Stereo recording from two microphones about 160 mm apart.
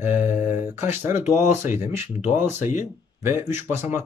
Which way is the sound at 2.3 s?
15° right (ahead or behind).